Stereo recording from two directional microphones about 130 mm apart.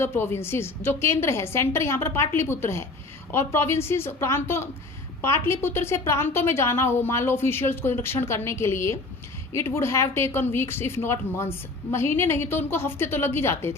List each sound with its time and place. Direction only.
0.0 s a woman's voice: 20° left (ahead or behind)